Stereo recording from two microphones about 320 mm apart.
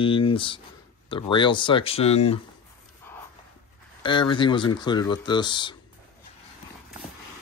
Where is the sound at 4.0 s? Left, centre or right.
Centre.